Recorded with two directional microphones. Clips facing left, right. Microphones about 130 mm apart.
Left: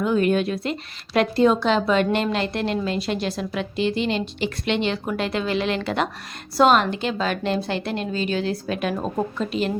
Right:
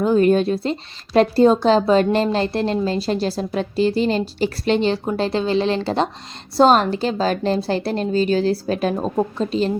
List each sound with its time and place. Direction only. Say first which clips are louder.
0.0 s a woman's voice: right 5 dB; 35° right (ahead or behind)